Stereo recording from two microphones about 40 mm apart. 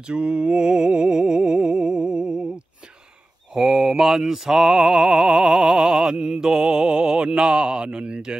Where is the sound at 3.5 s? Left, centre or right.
Centre.